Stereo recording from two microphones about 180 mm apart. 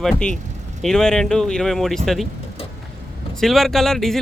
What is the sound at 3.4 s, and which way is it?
Speech, centre (ahead or behind).